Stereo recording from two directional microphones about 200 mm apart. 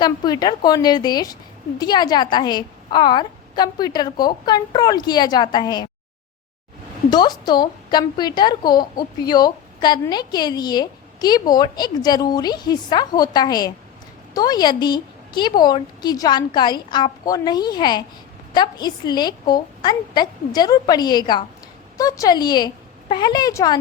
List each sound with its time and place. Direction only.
0.0 s a woman's voice: 20° left (ahead or behind)
7.1 s a woman's voice: 20° left (ahead or behind)